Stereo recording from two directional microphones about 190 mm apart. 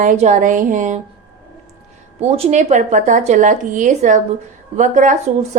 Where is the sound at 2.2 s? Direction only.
30° right (ahead or behind).